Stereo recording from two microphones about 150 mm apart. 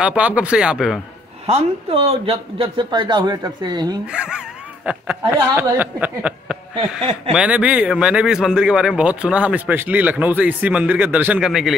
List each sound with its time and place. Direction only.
0.0 s speech: 10° right (ahead or behind)
1.4 s a man's voice: 40° right (ahead or behind)
4.1 s a sound: 5° right (ahead or behind)
5.6 s speech: 10° right (ahead or behind)